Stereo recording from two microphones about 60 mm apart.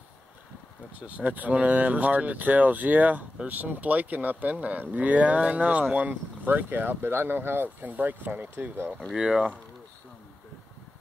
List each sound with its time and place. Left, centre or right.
0.9 s speech: right
9.1 s speech: centre